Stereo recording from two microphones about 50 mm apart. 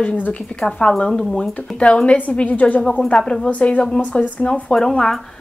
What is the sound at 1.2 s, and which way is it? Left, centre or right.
A woman's voice, centre.